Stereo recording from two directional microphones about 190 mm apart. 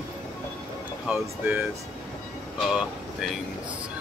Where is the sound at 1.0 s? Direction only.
5° right (ahead or behind).